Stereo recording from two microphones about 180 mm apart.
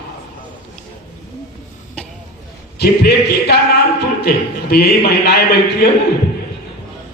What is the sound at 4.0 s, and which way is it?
A man's voice, 60° left (ahead or behind).